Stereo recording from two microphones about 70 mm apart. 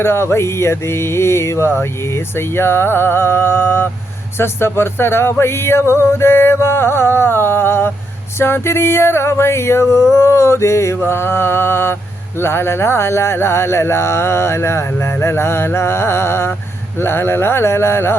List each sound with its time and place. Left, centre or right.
0.0 s speech: left